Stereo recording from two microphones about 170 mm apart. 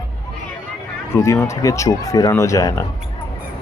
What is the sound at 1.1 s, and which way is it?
Speech, 15° left (ahead or behind).